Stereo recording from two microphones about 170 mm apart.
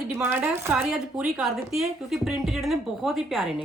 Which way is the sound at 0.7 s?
5° right (ahead or behind).